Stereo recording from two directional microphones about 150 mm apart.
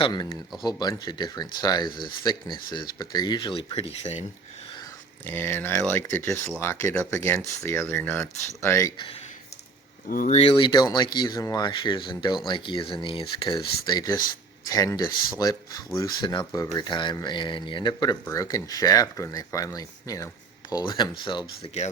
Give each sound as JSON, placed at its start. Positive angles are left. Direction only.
{"t": 0.0, "sound": "speech", "side_deg": 30}
{"t": 5.2, "sound": "speech", "side_deg": 15}
{"t": 10.1, "sound": "speech", "side_deg": 65}
{"t": 10.3, "sound": "speech", "side_deg": 35}
{"t": 20.8, "sound": "speech", "side_deg": 30}